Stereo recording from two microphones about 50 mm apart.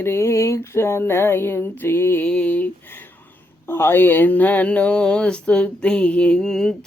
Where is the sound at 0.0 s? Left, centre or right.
Left.